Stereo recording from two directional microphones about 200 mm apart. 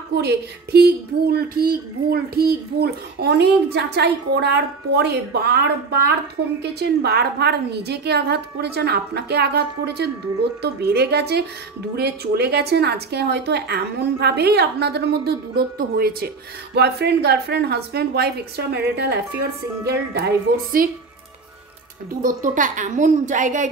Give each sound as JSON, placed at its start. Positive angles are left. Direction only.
{"t": 0.1, "sound": "a woman's voice", "side_deg": -55}
{"t": 22.4, "sound": "a woman's voice", "side_deg": -40}